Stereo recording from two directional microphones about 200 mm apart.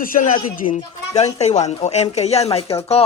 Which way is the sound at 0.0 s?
40° left (ahead or behind).